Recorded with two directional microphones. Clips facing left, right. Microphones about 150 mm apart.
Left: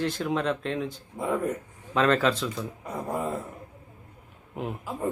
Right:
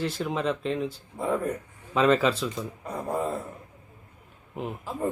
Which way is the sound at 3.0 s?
10° left (ahead or behind).